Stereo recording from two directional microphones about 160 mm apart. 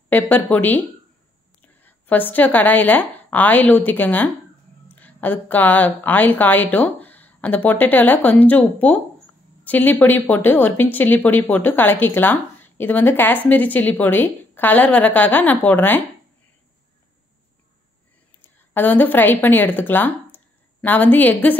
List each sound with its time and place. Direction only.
0.1 s a woman's voice: 10° left (ahead or behind)
18.7 s speech: 10° left (ahead or behind)